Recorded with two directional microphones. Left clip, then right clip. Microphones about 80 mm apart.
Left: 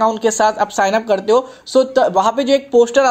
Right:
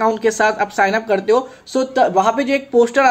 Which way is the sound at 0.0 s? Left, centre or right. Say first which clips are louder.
Left 1 dB; left.